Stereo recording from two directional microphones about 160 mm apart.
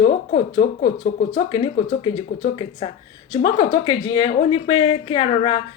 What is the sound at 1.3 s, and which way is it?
A woman's voice, 30° left (ahead or behind).